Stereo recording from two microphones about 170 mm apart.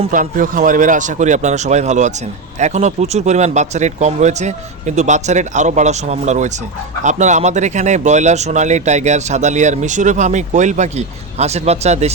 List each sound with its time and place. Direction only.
0.1 s speech: 50° right (ahead or behind)